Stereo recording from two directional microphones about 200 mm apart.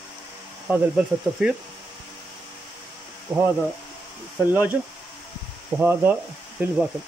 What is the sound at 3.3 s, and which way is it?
Speech, 15° right (ahead or behind).